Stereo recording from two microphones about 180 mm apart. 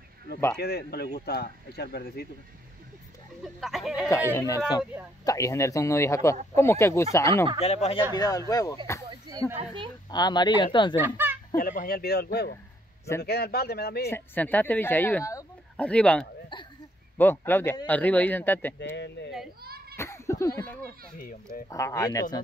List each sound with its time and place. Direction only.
0.6 s speech: 60° left (ahead or behind)
3.6 s speech: centre (ahead or behind)
4.1 s speech: 15° left (ahead or behind)
7.6 s speech: 35° left (ahead or behind)
8.1 s speech: 20° left (ahead or behind)
10.0 s speech: 25° left (ahead or behind)
11.0 s speech: 10° right (ahead or behind)
11.5 s speech: 50° left (ahead or behind)
14.1 s speech: 10° left (ahead or behind)
19.6 s children playing: 55° right (ahead or behind)
20.0 s a sound: 15° left (ahead or behind)
21.2 s speech: 50° left (ahead or behind)
21.6 s speech: 15° left (ahead or behind)